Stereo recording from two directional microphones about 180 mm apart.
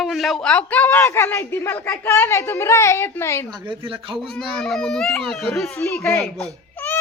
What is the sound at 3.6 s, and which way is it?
Speech, 30° right (ahead or behind).